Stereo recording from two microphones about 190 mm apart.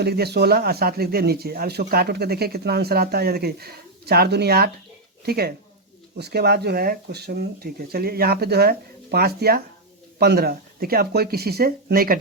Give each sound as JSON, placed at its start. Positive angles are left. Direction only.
{"t": 0.0, "sound": "speech", "side_deg": -60}